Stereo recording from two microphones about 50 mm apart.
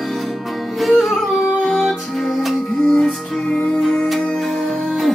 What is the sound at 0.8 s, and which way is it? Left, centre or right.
Music, centre.